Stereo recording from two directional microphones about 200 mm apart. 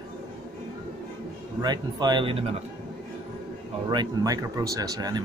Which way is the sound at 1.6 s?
20° right (ahead or behind).